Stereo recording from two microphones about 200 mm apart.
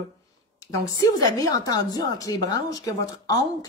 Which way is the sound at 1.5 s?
20° left (ahead or behind).